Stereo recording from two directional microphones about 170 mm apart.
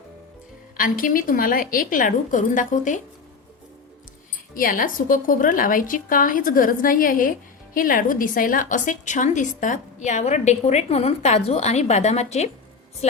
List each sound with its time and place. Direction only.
0.8 s a woman's voice: 55° left (ahead or behind)
4.5 s a woman's voice: 55° left (ahead or behind)